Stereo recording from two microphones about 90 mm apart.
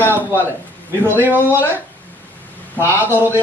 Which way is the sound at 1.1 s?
20° right (ahead or behind).